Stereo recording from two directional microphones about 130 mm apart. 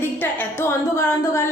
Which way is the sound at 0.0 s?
15° left (ahead or behind).